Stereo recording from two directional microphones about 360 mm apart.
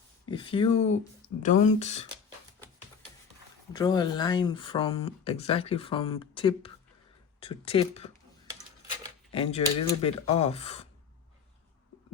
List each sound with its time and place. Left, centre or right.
0.3 s speech: centre
3.7 s speech: centre
9.3 s speech: centre